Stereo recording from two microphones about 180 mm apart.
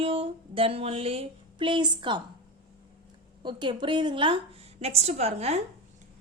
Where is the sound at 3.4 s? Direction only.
25° right (ahead or behind).